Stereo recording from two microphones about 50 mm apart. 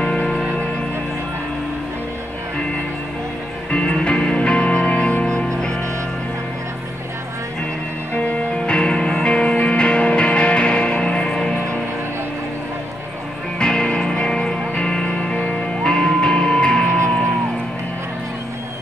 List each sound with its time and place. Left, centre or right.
0.0 s music: centre
3.7 s music: left
8.2 s music: left
13.6 s music: centre